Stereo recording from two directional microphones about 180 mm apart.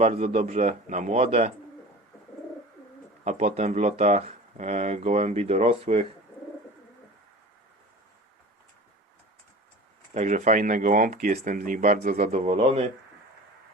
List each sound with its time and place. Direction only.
0.0 s speech: 40° right (ahead or behind)
3.2 s speech: 35° right (ahead or behind)
10.2 s speech: 40° right (ahead or behind)